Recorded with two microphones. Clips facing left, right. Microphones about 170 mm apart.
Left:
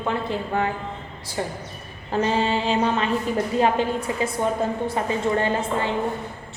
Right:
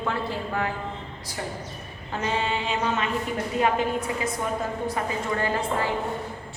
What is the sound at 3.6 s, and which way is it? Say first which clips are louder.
Speech: left 1 dB; 30° left (ahead or behind).